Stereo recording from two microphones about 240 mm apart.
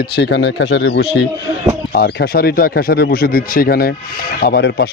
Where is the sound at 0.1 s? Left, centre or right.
Left.